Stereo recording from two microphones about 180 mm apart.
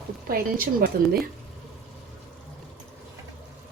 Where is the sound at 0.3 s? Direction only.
55° right (ahead or behind).